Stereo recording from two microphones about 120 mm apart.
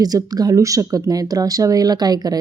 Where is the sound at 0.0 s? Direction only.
30° right (ahead or behind).